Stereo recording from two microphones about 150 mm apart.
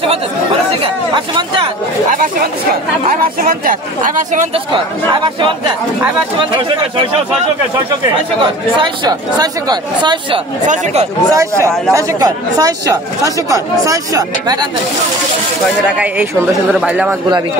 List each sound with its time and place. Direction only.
3.1 s speech: 75° right (ahead or behind)
4.2 s speech: 55° right (ahead or behind)
8.7 s speech: 30° right (ahead or behind)
10.7 s speech: 45° right (ahead or behind)
11.3 s speech: 20° right (ahead or behind)
16.8 s speech: 10° right (ahead or behind)